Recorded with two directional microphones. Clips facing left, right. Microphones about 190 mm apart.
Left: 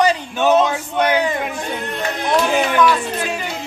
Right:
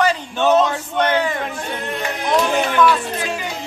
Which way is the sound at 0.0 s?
15° left (ahead or behind).